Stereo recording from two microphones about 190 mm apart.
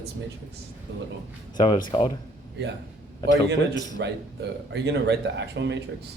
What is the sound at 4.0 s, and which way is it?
A man's voice, 65° right (ahead or behind).